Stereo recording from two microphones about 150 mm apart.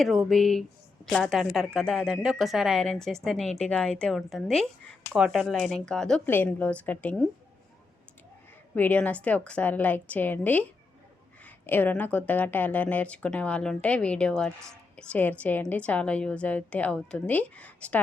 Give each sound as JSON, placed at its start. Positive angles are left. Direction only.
{"t": 0.0, "sound": "a woman's voice", "side_deg": 0}
{"t": 8.7, "sound": "speech", "side_deg": 10}